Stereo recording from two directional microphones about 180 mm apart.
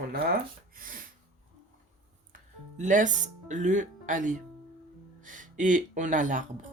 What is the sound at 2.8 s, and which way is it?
Speech, 45° right (ahead or behind).